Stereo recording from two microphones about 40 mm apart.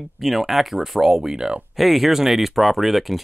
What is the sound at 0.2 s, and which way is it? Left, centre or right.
Speech, centre.